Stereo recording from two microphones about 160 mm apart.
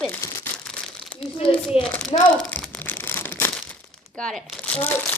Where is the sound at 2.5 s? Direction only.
10° left (ahead or behind).